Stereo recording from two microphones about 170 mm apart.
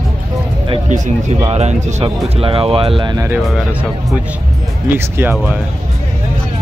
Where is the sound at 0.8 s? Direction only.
45° right (ahead or behind); by 3.3 s 25° right (ahead or behind).